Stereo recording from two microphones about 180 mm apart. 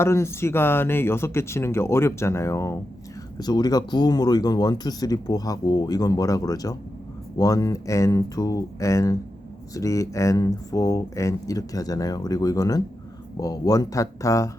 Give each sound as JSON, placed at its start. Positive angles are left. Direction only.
{"t": 0.0, "sound": "speech", "side_deg": 15}